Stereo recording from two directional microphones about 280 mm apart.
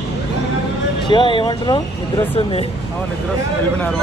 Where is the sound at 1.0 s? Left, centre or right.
Centre.